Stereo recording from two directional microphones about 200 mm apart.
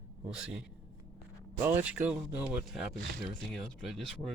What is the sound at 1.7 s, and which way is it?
Speech, 10° right (ahead or behind).